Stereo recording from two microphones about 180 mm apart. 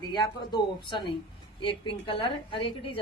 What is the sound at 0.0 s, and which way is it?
A woman's voice, 25° left (ahead or behind).